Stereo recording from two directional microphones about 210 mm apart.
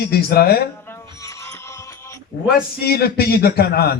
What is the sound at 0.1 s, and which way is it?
Speech, 45° left (ahead or behind).